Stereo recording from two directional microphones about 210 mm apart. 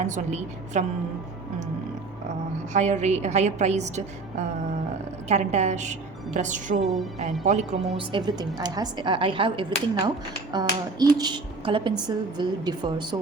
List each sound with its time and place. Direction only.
0.0 s a woman's voice: 35° right (ahead or behind)
2.7 s a woman's voice: 35° right (ahead or behind)
5.3 s a woman's voice: 30° right (ahead or behind)
7.9 s a woman's voice: 20° right (ahead or behind)